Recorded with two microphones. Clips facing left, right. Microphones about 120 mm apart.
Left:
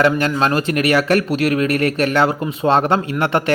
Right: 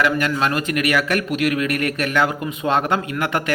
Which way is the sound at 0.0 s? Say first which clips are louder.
Left 4 dB; 30° left (ahead or behind).